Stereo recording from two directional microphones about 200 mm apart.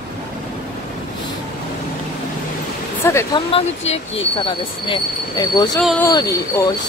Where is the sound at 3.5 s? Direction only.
30° left (ahead or behind); by 6.7 s 15° left (ahead or behind).